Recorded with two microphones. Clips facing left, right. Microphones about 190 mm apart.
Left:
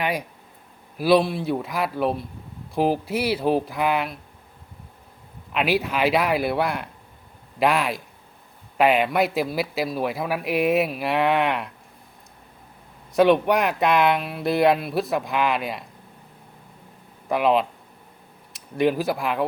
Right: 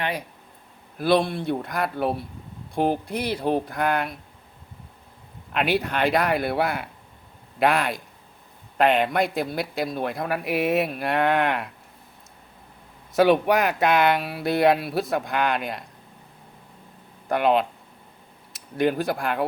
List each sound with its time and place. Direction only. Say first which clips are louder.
0.0 s speech: left 3 dB; 10° left (ahead or behind)
5.5 s speech: left 1 dB; centre (ahead or behind)
13.1 s speech: left 1 dB; centre (ahead or behind)
17.2 s speech: left 1 dB; centre (ahead or behind)